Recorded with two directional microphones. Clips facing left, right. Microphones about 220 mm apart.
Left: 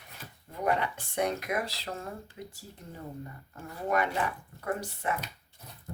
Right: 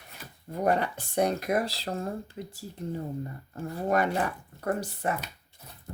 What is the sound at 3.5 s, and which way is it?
Speech, 35° right (ahead or behind).